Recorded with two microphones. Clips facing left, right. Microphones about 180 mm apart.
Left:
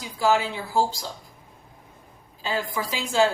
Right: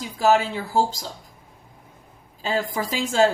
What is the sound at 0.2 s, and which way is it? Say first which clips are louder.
Speech: right 3 dB; 45° right (ahead or behind).